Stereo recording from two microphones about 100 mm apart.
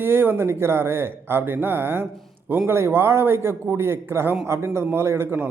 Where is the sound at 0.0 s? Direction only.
20° right (ahead or behind).